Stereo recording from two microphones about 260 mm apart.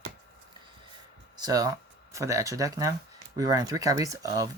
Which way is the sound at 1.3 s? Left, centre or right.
Centre.